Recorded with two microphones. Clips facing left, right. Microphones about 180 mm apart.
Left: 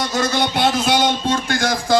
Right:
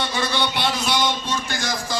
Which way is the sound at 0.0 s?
45° left (ahead or behind).